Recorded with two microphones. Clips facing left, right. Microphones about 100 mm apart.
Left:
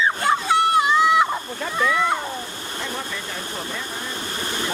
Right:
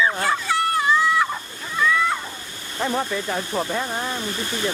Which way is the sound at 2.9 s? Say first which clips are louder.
Right 6 dB; 40° right (ahead or behind).